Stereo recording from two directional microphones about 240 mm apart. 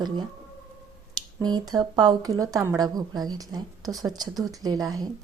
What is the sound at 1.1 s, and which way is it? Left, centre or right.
Speech, centre.